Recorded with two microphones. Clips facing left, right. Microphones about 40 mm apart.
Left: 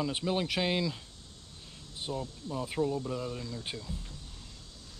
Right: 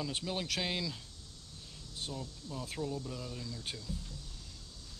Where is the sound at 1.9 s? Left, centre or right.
Centre.